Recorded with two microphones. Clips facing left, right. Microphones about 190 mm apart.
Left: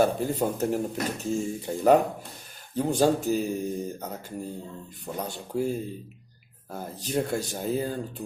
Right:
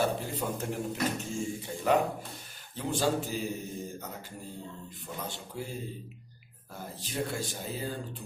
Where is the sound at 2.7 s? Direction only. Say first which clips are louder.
Left 7 dB; 45° left (ahead or behind).